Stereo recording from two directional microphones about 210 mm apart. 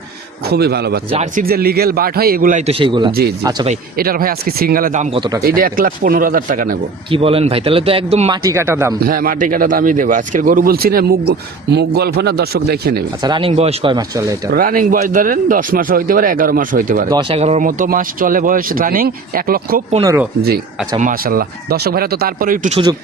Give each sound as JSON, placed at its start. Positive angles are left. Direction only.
{"t": 0.4, "sound": "speech", "side_deg": -50}
{"t": 1.1, "sound": "speech", "side_deg": -35}
{"t": 3.1, "sound": "speech", "side_deg": -45}
{"t": 5.1, "sound": "a man's voice", "side_deg": -20}
{"t": 5.4, "sound": "speech", "side_deg": -45}
{"t": 7.1, "sound": "a man's voice", "side_deg": -25}
{"t": 8.4, "sound": "speech", "side_deg": -15}
{"t": 9.0, "sound": "speech", "side_deg": -45}
{"t": 13.2, "sound": "a man's voice", "side_deg": -25}
{"t": 14.5, "sound": "speech", "side_deg": -45}
{"t": 17.1, "sound": "speech", "side_deg": -20}
{"t": 21.0, "sound": "speech", "side_deg": -40}